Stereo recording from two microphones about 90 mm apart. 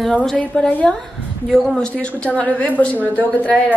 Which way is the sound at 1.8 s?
10° left (ahead or behind).